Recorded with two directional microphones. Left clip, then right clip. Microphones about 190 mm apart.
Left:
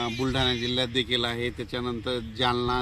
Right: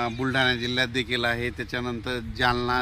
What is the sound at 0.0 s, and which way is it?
A man's voice, 5° right (ahead or behind).